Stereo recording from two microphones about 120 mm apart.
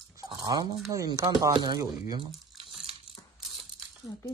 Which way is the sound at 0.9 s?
30° right (ahead or behind).